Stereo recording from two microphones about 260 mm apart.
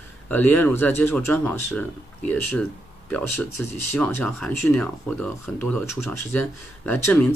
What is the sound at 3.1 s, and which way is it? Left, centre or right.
Speech, centre.